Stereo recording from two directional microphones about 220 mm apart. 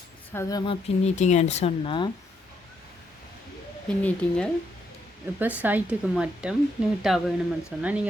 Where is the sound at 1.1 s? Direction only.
30° left (ahead or behind).